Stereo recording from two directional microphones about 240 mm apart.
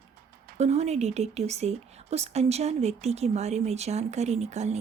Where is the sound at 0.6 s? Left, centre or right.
Right.